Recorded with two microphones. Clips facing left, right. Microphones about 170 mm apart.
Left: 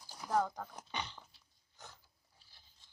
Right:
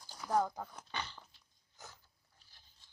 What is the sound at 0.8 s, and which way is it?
Dog, 15° left (ahead or behind).